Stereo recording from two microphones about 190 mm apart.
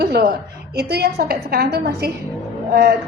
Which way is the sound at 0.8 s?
55° right (ahead or behind).